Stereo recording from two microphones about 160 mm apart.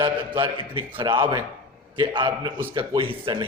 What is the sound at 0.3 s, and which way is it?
A man's voice, 30° right (ahead or behind).